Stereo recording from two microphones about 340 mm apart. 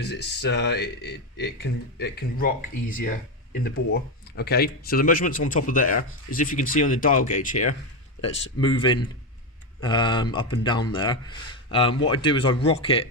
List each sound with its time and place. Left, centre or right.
0.0 s speech: left